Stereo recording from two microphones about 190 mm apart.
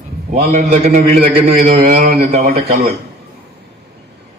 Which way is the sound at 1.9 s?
35° right (ahead or behind).